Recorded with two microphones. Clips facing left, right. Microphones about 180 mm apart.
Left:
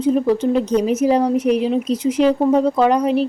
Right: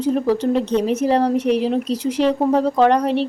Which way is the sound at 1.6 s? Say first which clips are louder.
Left 1 dB; centre (ahead or behind).